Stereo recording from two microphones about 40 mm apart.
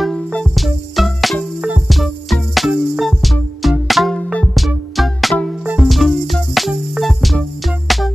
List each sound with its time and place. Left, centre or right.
0.6 s music: centre